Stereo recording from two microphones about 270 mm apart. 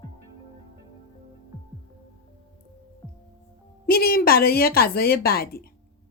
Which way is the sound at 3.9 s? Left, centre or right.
Left.